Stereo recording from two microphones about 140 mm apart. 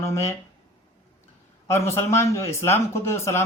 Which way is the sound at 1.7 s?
20° left (ahead or behind).